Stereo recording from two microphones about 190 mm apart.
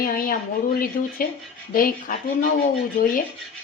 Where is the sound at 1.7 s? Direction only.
45° left (ahead or behind).